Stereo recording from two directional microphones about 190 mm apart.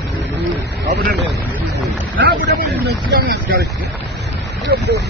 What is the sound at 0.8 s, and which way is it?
A man's voice, 60° right (ahead or behind).